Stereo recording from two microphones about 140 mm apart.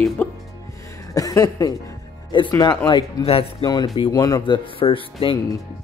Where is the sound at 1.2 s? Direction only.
25° left (ahead or behind).